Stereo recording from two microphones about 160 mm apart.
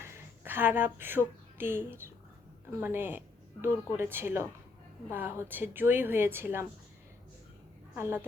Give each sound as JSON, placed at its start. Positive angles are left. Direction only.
{"t": 0.0, "sound": "a sound", "side_deg": -15}
{"t": 1.5, "sound": "speech", "side_deg": -15}
{"t": 7.9, "sound": "speech", "side_deg": -15}